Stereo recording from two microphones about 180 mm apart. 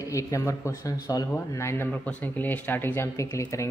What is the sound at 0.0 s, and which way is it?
Speech, 15° left (ahead or behind).